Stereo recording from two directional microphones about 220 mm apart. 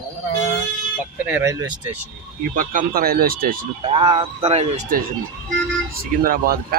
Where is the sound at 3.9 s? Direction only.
25° right (ahead or behind).